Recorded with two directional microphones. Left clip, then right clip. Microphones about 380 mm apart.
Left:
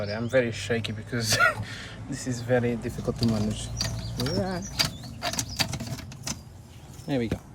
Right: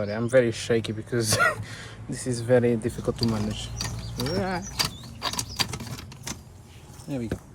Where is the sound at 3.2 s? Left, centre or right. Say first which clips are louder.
Even; centre.